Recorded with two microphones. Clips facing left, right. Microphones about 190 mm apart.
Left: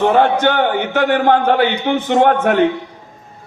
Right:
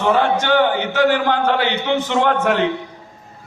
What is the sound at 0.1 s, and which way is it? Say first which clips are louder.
A man's voice: left 3 dB; 55° left (ahead or behind).